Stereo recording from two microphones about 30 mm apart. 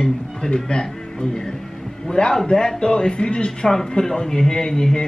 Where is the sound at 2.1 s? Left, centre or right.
Left.